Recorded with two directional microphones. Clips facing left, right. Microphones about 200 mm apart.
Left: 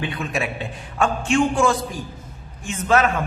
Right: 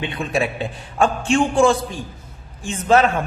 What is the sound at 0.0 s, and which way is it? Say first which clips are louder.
A man's voice: right 3 dB; 25° right (ahead or behind).